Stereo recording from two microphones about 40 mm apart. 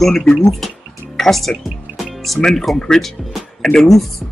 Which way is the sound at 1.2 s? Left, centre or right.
Centre.